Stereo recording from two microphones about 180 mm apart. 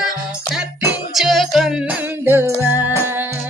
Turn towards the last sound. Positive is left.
turn(degrees=-10)  # may be behind; listen again after turning